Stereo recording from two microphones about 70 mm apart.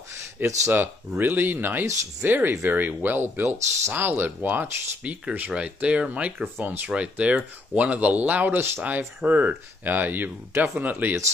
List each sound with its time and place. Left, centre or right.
0.4 s speech: right
3.4 s speech: right
6.9 s speech: centre